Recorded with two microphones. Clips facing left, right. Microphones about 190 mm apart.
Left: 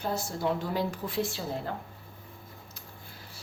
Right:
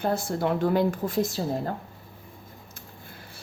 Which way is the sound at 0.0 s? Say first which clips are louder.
Right 5 dB; 55° right (ahead or behind).